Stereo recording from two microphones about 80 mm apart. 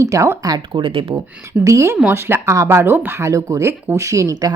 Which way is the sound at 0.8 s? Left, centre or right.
Right.